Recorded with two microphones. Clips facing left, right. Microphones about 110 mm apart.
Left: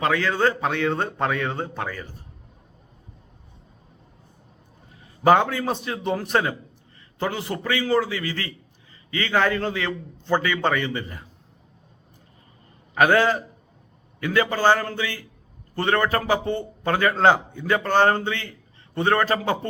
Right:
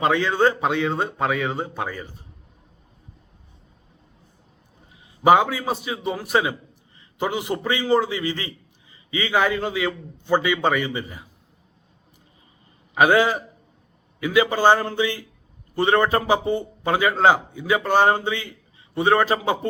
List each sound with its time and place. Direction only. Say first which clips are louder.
0.0 s a man's voice: right 2 dB; 20° right (ahead or behind)
5.2 s a man's voice: right 1 dB; 10° right (ahead or behind)
12.9 s a man's voice: right 1 dB; 10° right (ahead or behind)